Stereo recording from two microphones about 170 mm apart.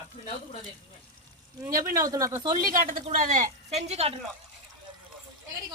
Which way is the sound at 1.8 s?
20° right (ahead or behind).